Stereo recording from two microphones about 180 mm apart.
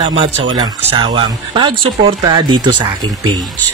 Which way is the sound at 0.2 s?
30° right (ahead or behind).